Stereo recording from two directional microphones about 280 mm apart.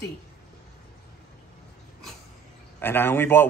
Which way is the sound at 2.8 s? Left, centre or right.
Centre.